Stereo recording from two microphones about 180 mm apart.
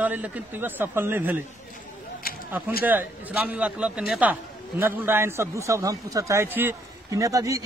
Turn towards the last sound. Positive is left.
turn(degrees=-20)  # may be behind; listen again after turning